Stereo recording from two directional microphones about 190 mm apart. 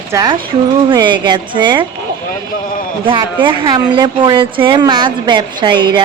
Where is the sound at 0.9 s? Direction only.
25° right (ahead or behind).